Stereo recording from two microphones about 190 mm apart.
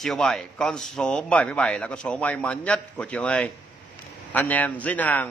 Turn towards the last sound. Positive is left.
turn(degrees=10)  # may be behind; listen again after turning